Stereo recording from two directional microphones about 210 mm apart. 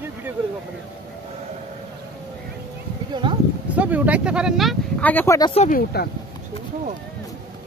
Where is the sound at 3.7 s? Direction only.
5° right (ahead or behind); by 5.5 s 15° left (ahead or behind).